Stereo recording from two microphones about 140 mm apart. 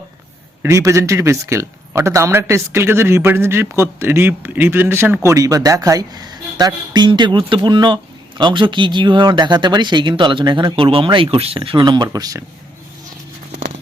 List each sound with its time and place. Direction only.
0.6 s a man's voice: 20° right (ahead or behind)